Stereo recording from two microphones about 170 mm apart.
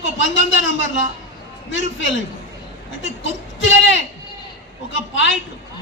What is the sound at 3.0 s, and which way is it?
Speech, 90° left.